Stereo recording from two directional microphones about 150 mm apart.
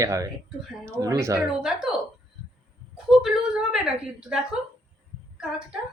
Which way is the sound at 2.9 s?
5° right (ahead or behind).